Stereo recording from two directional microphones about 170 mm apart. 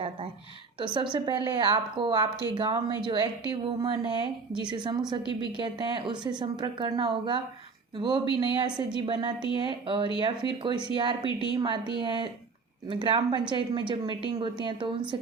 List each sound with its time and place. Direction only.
1.1 s a woman's voice: 25° right (ahead or behind)